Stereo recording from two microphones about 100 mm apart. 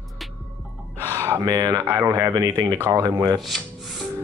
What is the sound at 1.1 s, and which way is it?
Speech, 30° right (ahead or behind).